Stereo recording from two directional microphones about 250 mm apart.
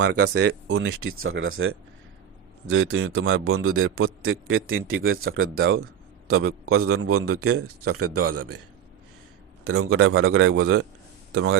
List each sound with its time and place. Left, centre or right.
0.0 s a man's voice: right
9.6 s a man's voice: right